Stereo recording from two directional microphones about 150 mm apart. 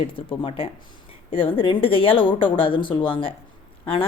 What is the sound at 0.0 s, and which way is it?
Speech, 35° left (ahead or behind).